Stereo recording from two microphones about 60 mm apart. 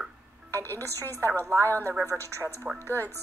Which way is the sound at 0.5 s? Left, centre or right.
Left.